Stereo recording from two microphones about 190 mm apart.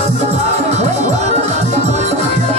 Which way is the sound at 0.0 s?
35° right (ahead or behind).